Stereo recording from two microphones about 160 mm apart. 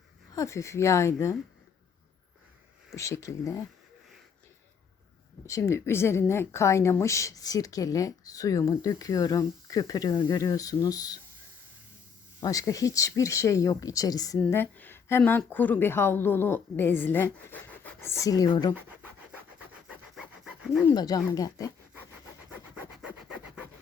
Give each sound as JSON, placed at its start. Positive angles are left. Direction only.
{"t": 0.3, "sound": "speech", "side_deg": 20}
{"t": 2.9, "sound": "a woman's voice", "side_deg": 20}
{"t": 5.5, "sound": "a woman's voice", "side_deg": 20}
{"t": 12.4, "sound": "speech", "side_deg": 20}
{"t": 19.9, "sound": "a sound", "side_deg": -5}
{"t": 20.9, "sound": "a woman's voice", "side_deg": 25}
{"t": 22.7, "sound": "sawing", "side_deg": -5}